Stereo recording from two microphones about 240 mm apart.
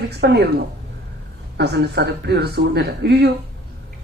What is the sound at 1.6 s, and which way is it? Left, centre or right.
Speech, right.